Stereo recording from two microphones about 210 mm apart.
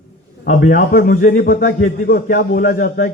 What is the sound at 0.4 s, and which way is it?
A man's voice, 40° left (ahead or behind).